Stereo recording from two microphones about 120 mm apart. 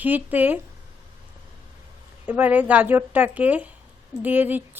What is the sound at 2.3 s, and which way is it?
A woman's voice, 15° right (ahead or behind).